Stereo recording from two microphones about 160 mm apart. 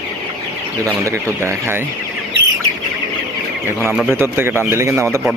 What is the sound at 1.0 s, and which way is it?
Speech, 15° right (ahead or behind).